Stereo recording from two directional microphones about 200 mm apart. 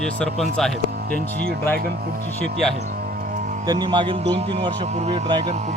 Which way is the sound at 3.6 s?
20° right (ahead or behind).